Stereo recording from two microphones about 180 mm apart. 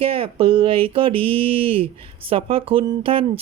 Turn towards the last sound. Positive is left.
turn(degrees=-30)  # may be behind; listen again after turning